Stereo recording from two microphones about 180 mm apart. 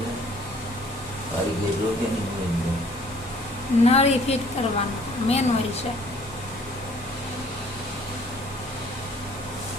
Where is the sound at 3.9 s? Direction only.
35° left (ahead or behind).